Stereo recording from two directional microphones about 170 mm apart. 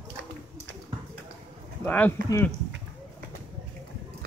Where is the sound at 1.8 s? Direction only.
10° left (ahead or behind).